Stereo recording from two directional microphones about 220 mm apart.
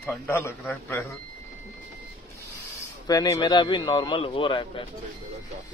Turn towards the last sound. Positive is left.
turn(degrees=20)  # may be behind; listen again after turning